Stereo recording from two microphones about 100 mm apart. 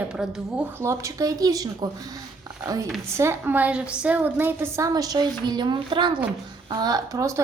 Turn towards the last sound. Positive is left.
turn(degrees=-30)  # may be behind; listen again after turning